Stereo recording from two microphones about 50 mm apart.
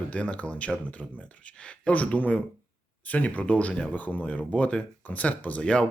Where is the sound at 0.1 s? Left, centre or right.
Left.